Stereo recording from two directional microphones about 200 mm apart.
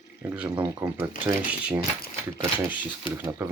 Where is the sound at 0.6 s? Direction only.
20° right (ahead or behind).